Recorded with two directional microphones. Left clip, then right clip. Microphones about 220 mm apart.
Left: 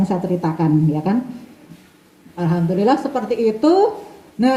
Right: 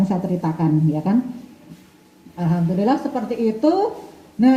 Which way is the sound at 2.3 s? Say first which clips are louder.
Left 3 dB; 45° left (ahead or behind).